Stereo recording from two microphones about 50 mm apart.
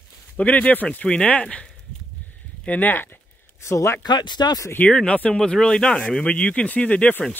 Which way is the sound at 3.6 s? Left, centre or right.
Left.